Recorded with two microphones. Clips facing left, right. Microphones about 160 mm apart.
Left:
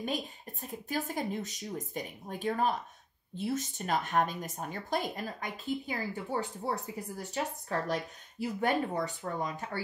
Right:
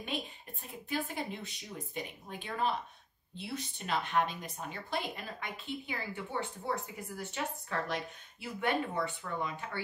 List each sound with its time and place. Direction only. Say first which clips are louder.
0.0 s speech: left 4 dB; 40° left (ahead or behind)